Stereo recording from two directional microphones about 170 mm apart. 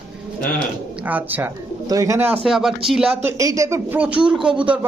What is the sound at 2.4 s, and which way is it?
Speech, centre (ahead or behind).